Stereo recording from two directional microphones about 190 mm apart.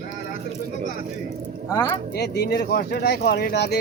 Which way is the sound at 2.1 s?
60° left (ahead or behind).